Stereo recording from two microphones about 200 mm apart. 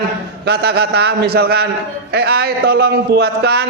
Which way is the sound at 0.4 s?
55° right (ahead or behind).